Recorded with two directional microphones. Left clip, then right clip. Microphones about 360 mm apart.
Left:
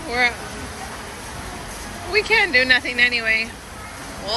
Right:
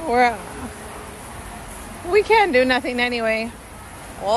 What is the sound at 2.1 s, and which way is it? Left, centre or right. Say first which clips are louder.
Speech: right 2 dB; centre.